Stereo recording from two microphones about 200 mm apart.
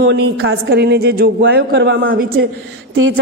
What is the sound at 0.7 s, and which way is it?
Speech, 50° right (ahead or behind).